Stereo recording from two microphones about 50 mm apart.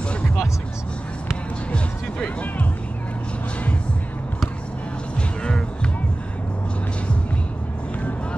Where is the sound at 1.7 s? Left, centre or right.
Left.